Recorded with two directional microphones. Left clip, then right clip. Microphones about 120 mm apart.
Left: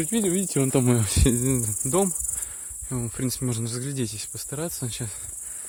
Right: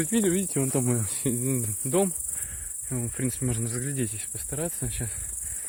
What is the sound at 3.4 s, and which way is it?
Speech, 35° left (ahead or behind).